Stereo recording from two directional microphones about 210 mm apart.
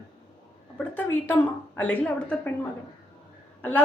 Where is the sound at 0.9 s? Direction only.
10° left (ahead or behind).